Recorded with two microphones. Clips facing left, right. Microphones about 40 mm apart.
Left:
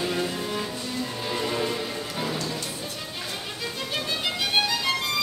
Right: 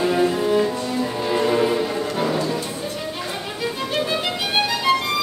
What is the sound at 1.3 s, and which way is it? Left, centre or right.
Music, centre.